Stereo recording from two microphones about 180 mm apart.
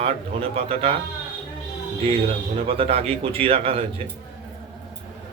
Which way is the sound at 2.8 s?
30° right (ahead or behind).